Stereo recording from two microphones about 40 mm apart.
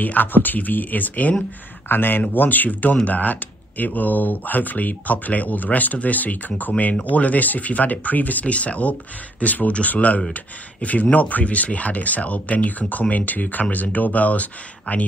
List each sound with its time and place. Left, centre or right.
0.0 s speech: left
1.9 s speech: left
2.3 s speech: left